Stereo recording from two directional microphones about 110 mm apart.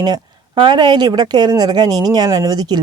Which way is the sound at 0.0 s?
45° right (ahead or behind).